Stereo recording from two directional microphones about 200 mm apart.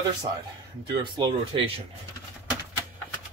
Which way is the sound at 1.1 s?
25° right (ahead or behind).